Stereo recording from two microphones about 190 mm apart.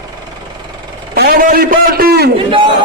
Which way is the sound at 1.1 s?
50° right (ahead or behind).